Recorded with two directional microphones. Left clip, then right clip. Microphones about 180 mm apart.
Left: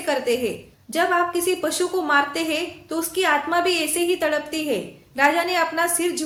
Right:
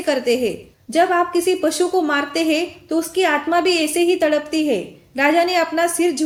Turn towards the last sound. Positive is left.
turn(degrees=-30)  # may be behind; listen again after turning